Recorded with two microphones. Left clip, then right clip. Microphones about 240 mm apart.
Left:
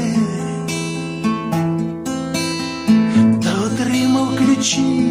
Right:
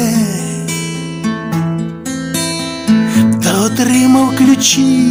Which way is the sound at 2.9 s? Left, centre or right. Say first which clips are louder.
Right 2 dB; right.